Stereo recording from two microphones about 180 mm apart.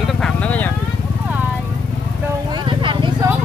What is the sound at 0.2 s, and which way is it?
Vehicle, 10° left (ahead or behind).